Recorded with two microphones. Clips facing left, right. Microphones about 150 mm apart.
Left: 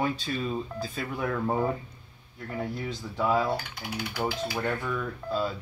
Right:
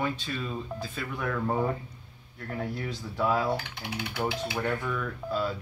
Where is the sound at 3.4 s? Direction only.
Centre (ahead or behind).